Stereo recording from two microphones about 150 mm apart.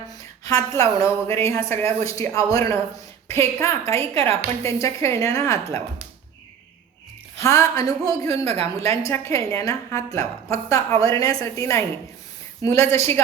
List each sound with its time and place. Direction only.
0.4 s a woman's voice: 20° left (ahead or behind)
7.3 s a woman's voice: 20° left (ahead or behind)
8.3 s speech: 45° right (ahead or behind)
8.7 s a woman's voice: 20° left (ahead or behind)